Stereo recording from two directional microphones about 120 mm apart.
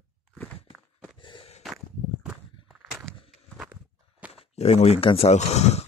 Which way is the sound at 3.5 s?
10° right (ahead or behind).